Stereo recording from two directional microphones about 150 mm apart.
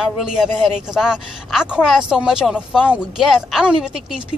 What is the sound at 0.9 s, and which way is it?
Speech, 5° right (ahead or behind).